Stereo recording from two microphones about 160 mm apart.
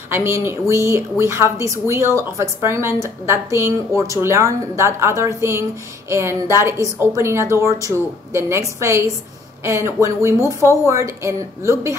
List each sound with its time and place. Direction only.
0.1 s a woman's voice: 15° right (ahead or behind)
10.4 s a woman's voice: 20° left (ahead or behind)
10.9 s a woman's voice: 20° right (ahead or behind)